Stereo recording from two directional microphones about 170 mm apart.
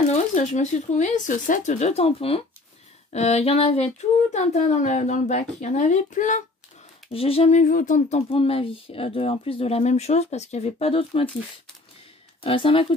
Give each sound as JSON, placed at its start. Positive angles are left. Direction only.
{"t": 0.1, "sound": "speech", "side_deg": 40}
{"t": 7.1, "sound": "speech", "side_deg": 35}
{"t": 12.4, "sound": "speech", "side_deg": 30}